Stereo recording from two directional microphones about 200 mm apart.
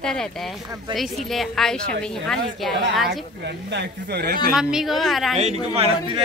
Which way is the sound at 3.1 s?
60° right (ahead or behind).